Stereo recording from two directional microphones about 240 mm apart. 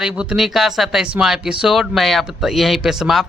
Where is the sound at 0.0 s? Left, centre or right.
Centre.